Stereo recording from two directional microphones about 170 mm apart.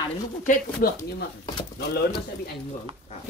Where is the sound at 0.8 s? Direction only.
65° left (ahead or behind).